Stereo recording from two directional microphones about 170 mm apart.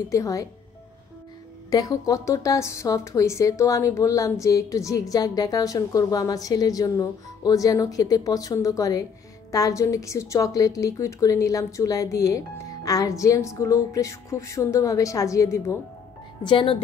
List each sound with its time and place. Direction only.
0.1 s a woman's voice: 20° left (ahead or behind)
1.7 s a woman's voice: 20° left (ahead or behind)
16.4 s a woman's voice: 30° left (ahead or behind)